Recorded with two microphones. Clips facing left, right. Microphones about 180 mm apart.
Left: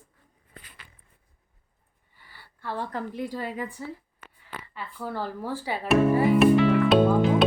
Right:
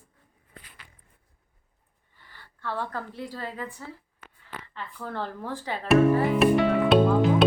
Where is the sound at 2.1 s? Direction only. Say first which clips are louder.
Even; 10° left (ahead or behind).